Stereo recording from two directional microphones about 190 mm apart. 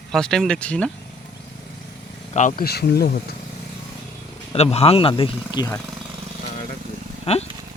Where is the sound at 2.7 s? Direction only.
55° left (ahead or behind).